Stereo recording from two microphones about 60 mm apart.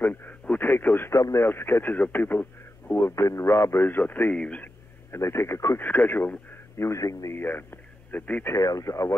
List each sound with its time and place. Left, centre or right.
0.0 s radio: left
1.1 s speech: left
1.5 s speech: left
3.2 s speech: left
3.8 s a man's voice: left
5.1 s speech: left
5.8 s speech: left
6.8 s speech: left
7.3 s a man's voice: left
8.5 s speech: left